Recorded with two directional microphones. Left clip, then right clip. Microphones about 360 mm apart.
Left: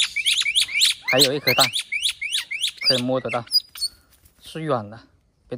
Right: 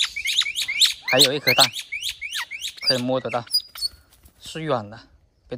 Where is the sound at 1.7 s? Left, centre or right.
Left.